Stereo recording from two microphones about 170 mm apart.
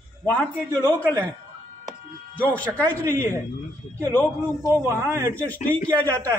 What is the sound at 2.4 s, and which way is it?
Speech, 10° left (ahead or behind).